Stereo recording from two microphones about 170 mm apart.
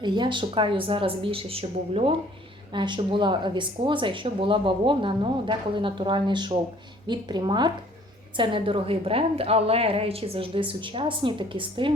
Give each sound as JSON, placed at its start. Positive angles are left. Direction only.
{"t": 0.0, "sound": "a woman's voice", "side_deg": -25}